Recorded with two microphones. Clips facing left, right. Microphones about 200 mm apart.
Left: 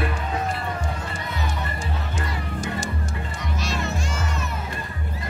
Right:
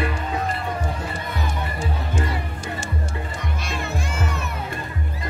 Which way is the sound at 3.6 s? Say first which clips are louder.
Left 2 dB; 55° right (ahead or behind).